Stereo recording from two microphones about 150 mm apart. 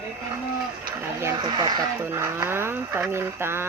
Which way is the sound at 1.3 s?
30° right (ahead or behind).